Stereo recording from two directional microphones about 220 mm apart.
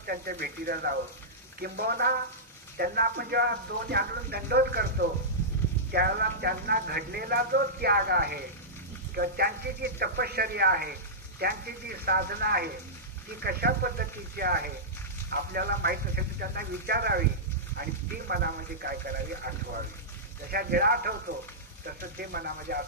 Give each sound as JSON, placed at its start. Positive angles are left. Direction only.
{"t": 0.0, "sound": "speech", "side_deg": -45}
{"t": 18.3, "sound": "speech", "side_deg": -45}